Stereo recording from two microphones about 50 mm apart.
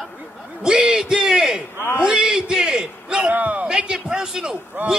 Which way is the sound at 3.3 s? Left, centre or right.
Right.